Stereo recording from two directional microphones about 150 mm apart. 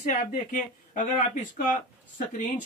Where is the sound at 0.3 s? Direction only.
60° left (ahead or behind).